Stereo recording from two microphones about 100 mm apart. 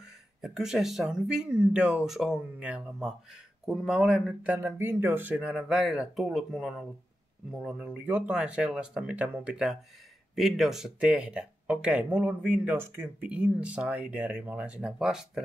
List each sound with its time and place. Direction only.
0.4 s speech: 5° right (ahead or behind)
4.5 s speech: 20° right (ahead or behind); by 15.4 s 5° right (ahead or behind)